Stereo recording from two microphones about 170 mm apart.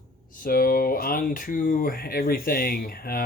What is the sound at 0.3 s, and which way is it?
Speech, 60° left (ahead or behind).